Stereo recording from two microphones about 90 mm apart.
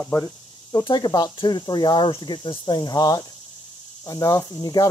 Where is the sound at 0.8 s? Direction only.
55° left (ahead or behind).